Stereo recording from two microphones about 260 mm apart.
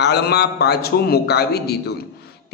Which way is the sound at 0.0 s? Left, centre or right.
Left.